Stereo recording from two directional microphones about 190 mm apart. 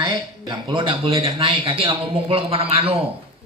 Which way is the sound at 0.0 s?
25° right (ahead or behind).